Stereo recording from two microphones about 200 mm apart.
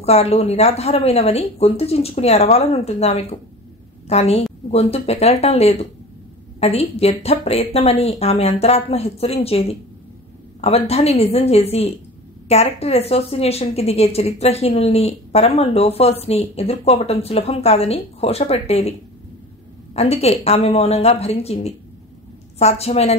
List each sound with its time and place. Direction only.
0.0 s a woman's voice: 30° left (ahead or behind)
20.0 s a woman's voice: 30° left (ahead or behind)